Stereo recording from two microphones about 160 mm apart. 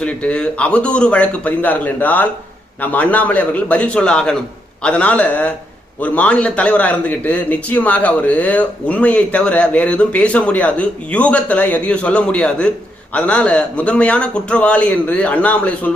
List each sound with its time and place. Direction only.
0.0 s a man's voice: 5° left (ahead or behind)